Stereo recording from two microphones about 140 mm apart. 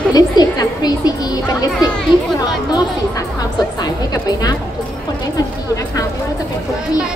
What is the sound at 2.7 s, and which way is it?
A woman's voice, 25° left (ahead or behind).